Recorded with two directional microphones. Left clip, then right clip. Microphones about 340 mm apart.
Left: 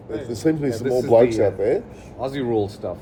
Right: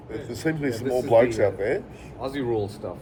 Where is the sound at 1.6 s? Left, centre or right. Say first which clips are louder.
Left 5 dB; centre.